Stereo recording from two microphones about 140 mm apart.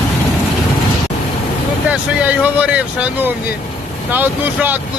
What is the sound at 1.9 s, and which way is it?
Speech, 10° right (ahead or behind).